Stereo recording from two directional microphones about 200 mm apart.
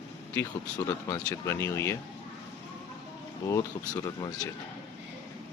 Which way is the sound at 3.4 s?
20° left (ahead or behind).